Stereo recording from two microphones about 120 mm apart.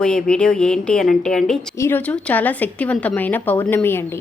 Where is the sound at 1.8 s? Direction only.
15° left (ahead or behind).